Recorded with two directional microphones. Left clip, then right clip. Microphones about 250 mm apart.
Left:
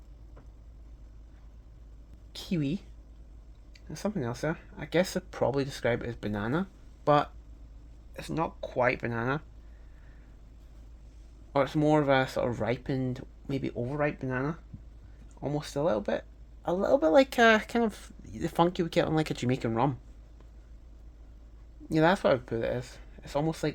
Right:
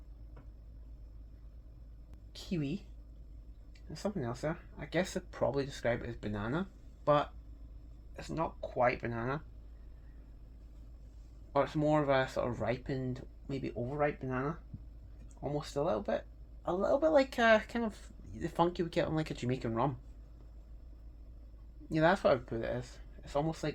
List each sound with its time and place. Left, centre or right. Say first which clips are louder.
2.3 s a sound: left 6 dB; left
3.9 s speech: left 4 dB; left
11.5 s speech: left 5 dB; left
21.8 s speech: left 4 dB; left